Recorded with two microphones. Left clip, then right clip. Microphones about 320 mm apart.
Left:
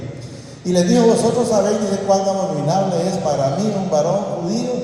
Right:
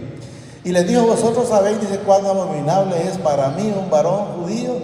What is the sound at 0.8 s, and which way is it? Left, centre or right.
A man's voice, right.